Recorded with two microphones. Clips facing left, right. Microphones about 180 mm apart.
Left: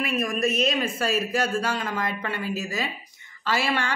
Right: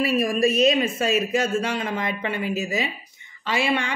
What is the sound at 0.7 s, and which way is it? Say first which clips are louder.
A woman's voice: right 5 dB; 25° right (ahead or behind).